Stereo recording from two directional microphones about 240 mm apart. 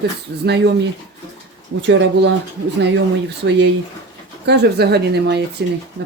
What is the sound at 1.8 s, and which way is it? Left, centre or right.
Speech, right.